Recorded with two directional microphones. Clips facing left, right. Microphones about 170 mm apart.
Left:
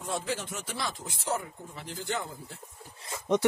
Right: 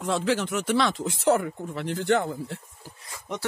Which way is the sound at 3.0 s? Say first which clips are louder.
Left 8 dB; 25° left (ahead or behind).